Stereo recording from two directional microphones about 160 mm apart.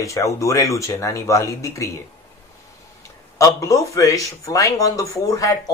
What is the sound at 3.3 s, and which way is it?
Speech, 20° left (ahead or behind).